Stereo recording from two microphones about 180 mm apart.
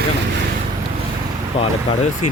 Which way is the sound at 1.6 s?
35° left (ahead or behind).